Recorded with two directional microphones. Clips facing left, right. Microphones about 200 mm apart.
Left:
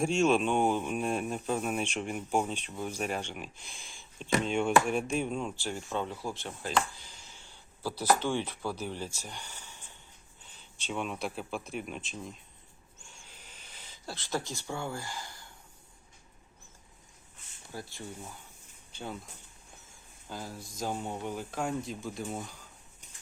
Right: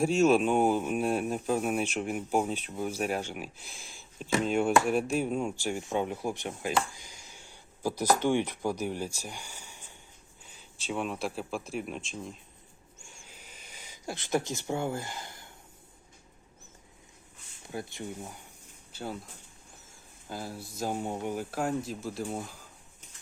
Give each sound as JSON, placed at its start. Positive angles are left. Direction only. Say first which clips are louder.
{"t": 0.0, "sound": "speech", "louder": "right 3 dB", "side_deg": -5}
{"t": 13.0, "sound": "a sound", "louder": "right 2 dB", "side_deg": -10}
{"t": 17.7, "sound": "speech", "louder": "right 5 dB", "side_deg": -20}
{"t": 18.9, "sound": "speech", "louder": "right 3 dB", "side_deg": -5}
{"t": 20.2, "sound": "speech", "louder": "right 3 dB", "side_deg": -10}